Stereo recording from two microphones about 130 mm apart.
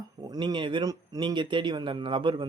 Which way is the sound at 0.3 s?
35° right (ahead or behind).